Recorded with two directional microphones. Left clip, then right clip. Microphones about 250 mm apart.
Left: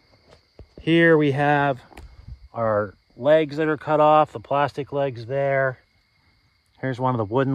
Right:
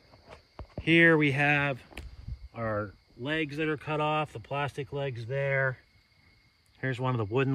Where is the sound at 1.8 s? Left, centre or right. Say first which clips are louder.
Left 2 dB; centre.